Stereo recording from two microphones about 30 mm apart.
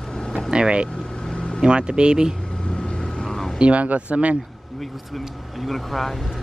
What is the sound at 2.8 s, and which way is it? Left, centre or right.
Vehicle, left.